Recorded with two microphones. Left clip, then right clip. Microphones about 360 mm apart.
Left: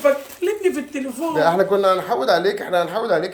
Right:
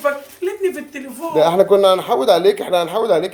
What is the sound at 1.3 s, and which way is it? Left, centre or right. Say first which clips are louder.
Speech: right 5 dB; right.